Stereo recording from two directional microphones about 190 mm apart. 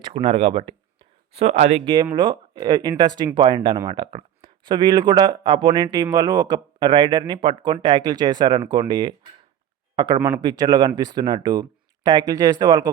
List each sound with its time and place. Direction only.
0.0 s speech: 25° right (ahead or behind)